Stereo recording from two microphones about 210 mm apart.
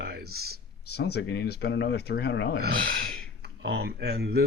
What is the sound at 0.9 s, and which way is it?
Speech, 50° left (ahead or behind).